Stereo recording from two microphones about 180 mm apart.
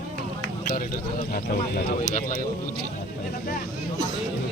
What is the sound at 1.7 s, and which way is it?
Speech, 50° left (ahead or behind).